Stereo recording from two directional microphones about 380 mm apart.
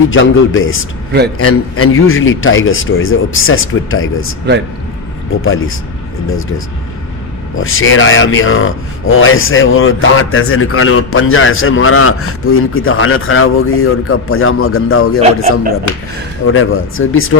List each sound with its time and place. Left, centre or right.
0.1 s speech: left
5.4 s speech: left
7.5 s speech: left
15.2 s a man's voice: centre
16.5 s speech: left